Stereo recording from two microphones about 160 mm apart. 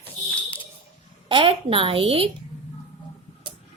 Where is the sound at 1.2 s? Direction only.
35° right (ahead or behind).